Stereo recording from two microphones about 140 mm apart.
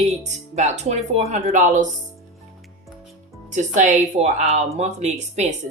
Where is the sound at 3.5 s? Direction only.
65° right (ahead or behind).